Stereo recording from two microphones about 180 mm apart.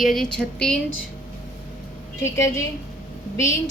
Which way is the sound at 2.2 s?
15° left (ahead or behind).